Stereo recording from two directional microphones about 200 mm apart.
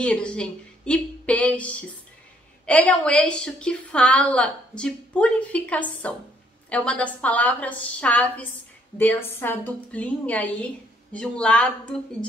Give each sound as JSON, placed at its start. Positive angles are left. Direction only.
{"t": 0.0, "sound": "a woman's voice", "side_deg": 5}